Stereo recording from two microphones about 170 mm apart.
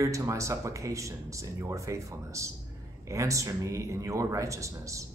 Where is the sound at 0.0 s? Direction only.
20° right (ahead or behind).